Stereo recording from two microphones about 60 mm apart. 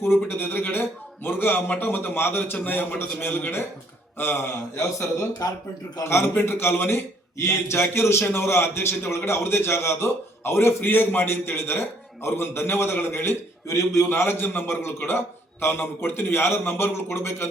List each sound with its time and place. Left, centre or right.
0.3 s a man's voice: left
6.1 s a man's voice: left